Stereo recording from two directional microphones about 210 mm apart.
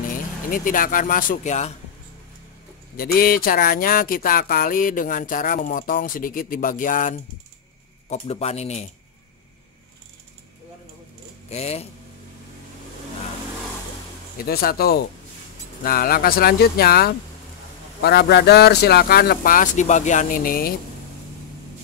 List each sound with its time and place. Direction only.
0.5 s speech: 40° left (ahead or behind)
3.0 s speech: 45° left (ahead or behind)
11.5 s speech: 30° left (ahead or behind)
14.4 s speech: 45° left (ahead or behind)